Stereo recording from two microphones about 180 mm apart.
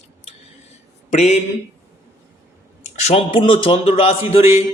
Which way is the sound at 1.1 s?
40° left (ahead or behind).